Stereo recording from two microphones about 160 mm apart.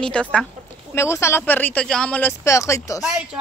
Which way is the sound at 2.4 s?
20° left (ahead or behind).